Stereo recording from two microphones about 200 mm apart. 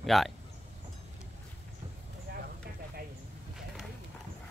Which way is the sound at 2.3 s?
55° right (ahead or behind).